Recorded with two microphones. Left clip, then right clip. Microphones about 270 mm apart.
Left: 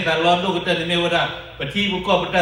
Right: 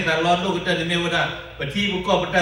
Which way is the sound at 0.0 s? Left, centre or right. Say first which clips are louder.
Left 2 dB; centre.